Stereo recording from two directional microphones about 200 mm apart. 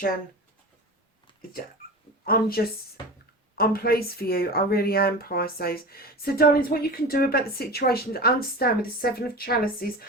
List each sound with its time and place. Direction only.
2.2 s speech: 50° left (ahead or behind)